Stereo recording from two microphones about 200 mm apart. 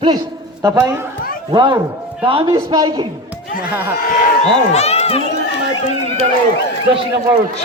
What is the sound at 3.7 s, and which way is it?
Speech, 10° right (ahead or behind).